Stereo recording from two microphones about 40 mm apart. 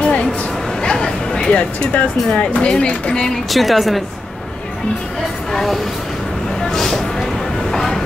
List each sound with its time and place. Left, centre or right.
0.0 s a sound: left
2.3 s speech: left
3.4 s speech: centre
5.5 s speech: centre
6.6 s vehicle: centre
7.7 s train: centre